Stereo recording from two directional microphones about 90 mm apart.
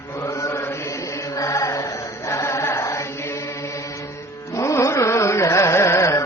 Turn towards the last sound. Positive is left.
turn(degrees=35)  # may be behind; listen again after turning